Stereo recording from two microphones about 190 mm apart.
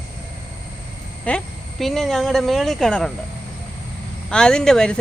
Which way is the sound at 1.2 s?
5° left (ahead or behind).